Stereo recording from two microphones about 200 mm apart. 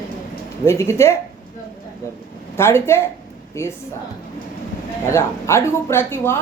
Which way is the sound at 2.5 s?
10° left (ahead or behind).